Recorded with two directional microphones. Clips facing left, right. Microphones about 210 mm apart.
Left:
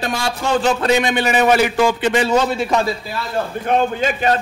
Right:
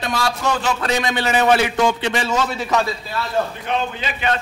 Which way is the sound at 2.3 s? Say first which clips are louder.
Left 4 dB; 30° left (ahead or behind).